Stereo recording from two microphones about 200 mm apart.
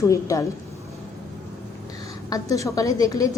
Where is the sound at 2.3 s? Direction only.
15° left (ahead or behind).